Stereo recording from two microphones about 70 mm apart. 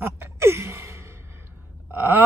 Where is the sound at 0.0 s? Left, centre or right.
Right.